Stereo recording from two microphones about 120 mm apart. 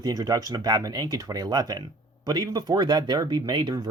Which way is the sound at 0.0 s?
30° right (ahead or behind).